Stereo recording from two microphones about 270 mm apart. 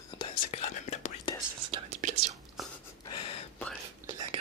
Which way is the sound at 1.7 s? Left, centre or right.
Right.